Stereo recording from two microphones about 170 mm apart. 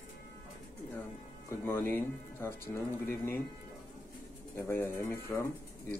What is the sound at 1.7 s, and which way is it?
Speech, 15° left (ahead or behind).